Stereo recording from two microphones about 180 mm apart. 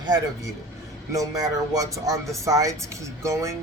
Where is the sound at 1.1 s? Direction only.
20° right (ahead or behind).